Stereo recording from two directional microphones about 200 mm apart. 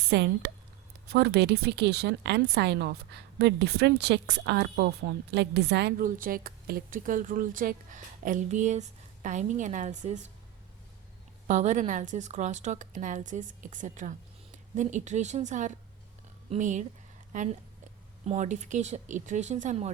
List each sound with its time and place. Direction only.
0.1 s a woman's voice: 60° right (ahead or behind)
6.1 s speech: 45° right (ahead or behind)
11.4 s a woman's voice: 40° right (ahead or behind)